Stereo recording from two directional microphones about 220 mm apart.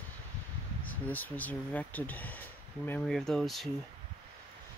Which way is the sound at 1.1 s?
10° left (ahead or behind).